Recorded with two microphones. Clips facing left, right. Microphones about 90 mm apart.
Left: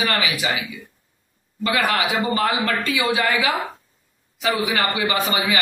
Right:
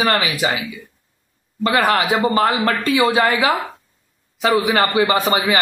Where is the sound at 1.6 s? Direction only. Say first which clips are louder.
Right 4 dB; 40° right (ahead or behind).